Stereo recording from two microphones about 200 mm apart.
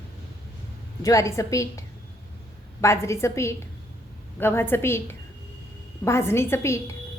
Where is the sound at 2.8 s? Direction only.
15° left (ahead or behind).